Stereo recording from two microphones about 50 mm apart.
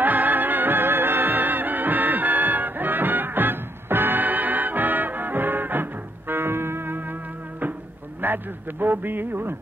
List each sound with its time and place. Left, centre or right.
0.0 s music: right
8.2 s a man's voice: right